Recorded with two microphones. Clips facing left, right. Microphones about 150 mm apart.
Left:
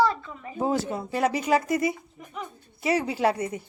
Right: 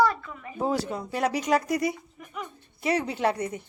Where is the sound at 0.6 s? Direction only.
Centre (ahead or behind).